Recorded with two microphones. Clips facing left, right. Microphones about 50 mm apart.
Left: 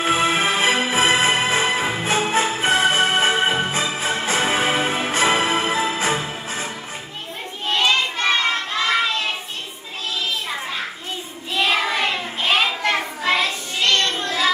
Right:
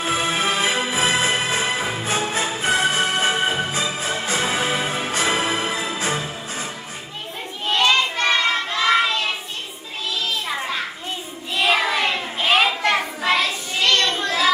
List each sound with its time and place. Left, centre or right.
0.0 s music: left
7.7 s child singing: centre
11.5 s child singing: centre